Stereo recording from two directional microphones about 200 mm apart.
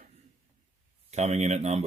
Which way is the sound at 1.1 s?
35° right (ahead or behind).